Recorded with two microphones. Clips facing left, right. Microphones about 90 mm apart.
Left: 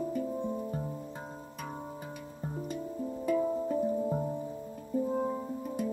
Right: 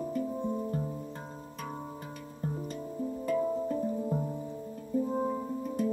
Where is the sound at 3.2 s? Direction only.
5° left (ahead or behind).